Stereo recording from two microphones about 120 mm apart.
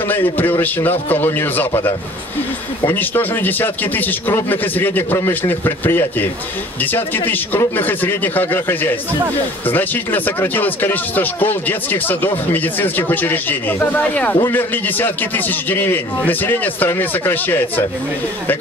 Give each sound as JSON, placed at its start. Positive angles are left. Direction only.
{"t": 0.1, "sound": "speech", "side_deg": 15}
{"t": 2.9, "sound": "speech", "side_deg": 15}